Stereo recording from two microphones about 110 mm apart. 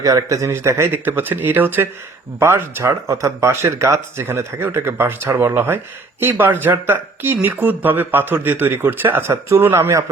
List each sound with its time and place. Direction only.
0.0 s speech: 30° right (ahead or behind)